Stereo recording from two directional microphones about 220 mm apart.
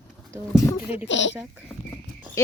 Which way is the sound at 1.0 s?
55° left (ahead or behind).